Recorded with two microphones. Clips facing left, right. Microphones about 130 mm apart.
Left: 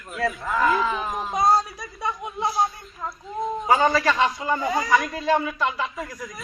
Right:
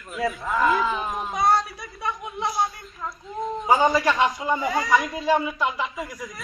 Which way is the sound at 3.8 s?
10° right (ahead or behind).